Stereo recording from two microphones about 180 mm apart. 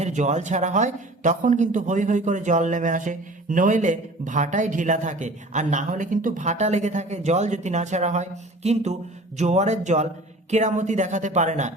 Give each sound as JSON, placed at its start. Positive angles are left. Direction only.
{"t": 0.0, "sound": "a woman's voice", "side_deg": -40}